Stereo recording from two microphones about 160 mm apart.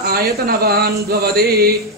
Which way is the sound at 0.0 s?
75° right (ahead or behind).